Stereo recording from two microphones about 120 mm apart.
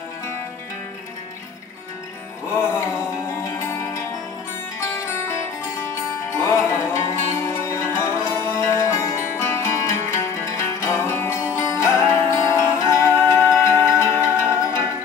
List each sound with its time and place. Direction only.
2.5 s music: 20° left (ahead or behind)